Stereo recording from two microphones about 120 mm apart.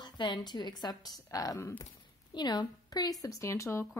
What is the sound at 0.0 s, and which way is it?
Speech, 40° left (ahead or behind).